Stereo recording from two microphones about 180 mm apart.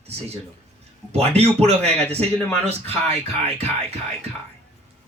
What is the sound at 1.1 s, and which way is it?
Speech, 35° right (ahead or behind).